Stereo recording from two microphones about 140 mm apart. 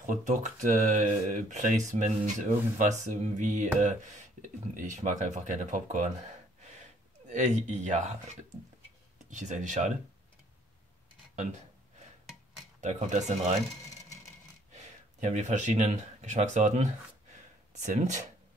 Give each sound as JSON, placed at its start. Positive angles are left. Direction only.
{"t": 0.0, "sound": "speech", "side_deg": -60}
{"t": 7.2, "sound": "speech", "side_deg": -55}
{"t": 9.3, "sound": "speech", "side_deg": -60}
{"t": 11.3, "sound": "a sound", "side_deg": -55}
{"t": 12.8, "sound": "speech", "side_deg": -60}
{"t": 14.7, "sound": "speech", "side_deg": -60}